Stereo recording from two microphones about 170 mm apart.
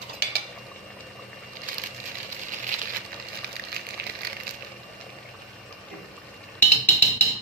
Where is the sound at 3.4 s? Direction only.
75° right (ahead or behind).